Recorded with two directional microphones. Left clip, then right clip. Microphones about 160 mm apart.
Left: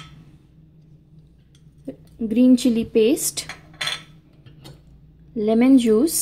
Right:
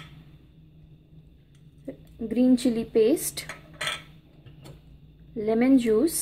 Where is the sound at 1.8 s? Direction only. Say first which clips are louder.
Left 5 dB; 50° left (ahead or behind).